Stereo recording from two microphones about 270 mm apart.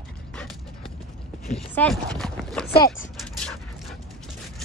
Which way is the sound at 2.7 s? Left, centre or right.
Left.